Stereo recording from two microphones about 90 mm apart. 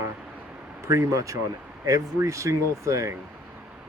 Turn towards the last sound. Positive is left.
turn(degrees=-35)  # may be behind; listen again after turning